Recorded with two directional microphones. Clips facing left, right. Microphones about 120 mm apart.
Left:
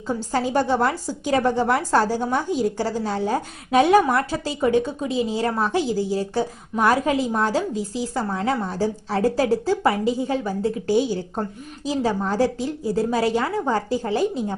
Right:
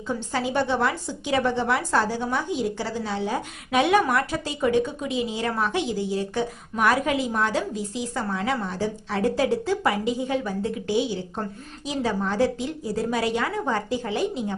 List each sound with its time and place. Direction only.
0.3 s a woman's voice: 40° left (ahead or behind)